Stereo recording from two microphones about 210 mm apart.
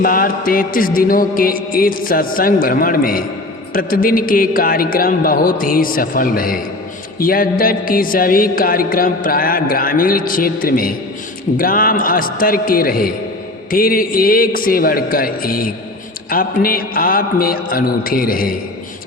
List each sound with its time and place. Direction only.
0.0 s music: 40° left (ahead or behind)